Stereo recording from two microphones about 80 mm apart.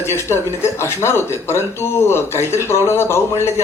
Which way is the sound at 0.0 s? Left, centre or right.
Left.